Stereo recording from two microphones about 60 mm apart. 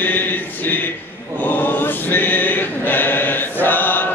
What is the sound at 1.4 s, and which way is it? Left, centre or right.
Choir, left.